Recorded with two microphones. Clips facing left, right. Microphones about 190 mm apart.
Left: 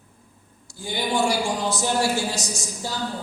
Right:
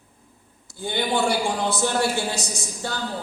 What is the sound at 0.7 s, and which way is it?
A man's voice, 60° right (ahead or behind).